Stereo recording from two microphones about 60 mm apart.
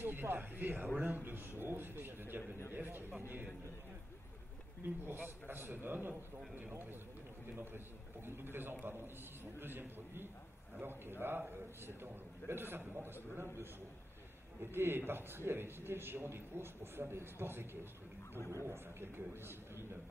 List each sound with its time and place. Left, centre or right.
0.0 s a man's voice: right
4.8 s a man's voice: right
8.4 s a man's voice: right
14.6 s a man's voice: right
18.7 s a man's voice: right